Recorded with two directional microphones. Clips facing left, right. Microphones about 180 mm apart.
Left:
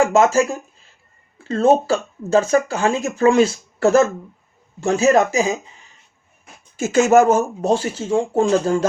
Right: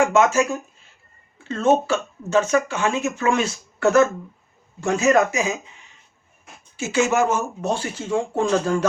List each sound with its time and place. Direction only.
0.1 s speech: 35° left (ahead or behind)
1.5 s speech: 35° left (ahead or behind)
6.7 s speech: 45° left (ahead or behind); by 8.9 s 30° left (ahead or behind)